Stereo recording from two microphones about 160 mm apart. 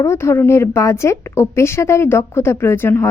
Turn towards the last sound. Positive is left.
turn(degrees=15)  # may be behind; listen again after turning